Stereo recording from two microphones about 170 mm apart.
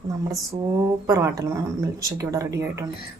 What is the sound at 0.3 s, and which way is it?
Speech, 20° right (ahead or behind).